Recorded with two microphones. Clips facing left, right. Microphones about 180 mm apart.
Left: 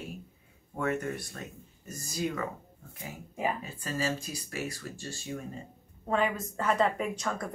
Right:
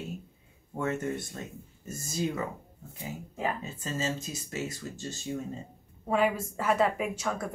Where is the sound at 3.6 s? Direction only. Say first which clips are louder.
Even; 25° right (ahead or behind).